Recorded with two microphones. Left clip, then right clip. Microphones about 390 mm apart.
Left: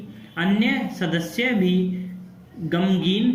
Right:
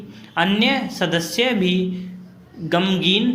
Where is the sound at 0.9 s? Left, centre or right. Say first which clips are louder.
Right 5 dB; right.